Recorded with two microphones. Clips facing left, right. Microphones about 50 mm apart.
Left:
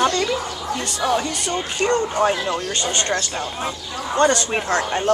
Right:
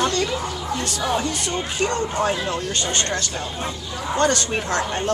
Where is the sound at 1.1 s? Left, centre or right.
Centre.